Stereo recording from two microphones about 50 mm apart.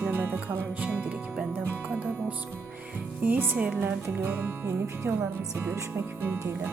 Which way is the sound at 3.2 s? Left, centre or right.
Right.